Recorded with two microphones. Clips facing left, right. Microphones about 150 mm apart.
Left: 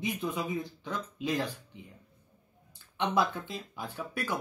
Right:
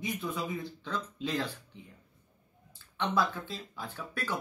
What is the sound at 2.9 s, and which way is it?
Speech, 15° left (ahead or behind).